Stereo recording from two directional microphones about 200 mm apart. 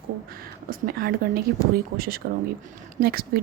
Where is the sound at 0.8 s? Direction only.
45° right (ahead or behind).